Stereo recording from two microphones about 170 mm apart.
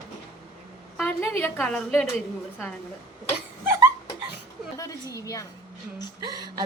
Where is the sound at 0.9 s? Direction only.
10° left (ahead or behind).